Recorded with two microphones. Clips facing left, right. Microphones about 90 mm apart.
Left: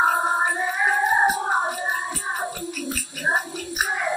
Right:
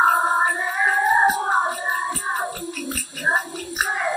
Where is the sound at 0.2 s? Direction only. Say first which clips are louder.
Right 2 dB; 20° right (ahead or behind).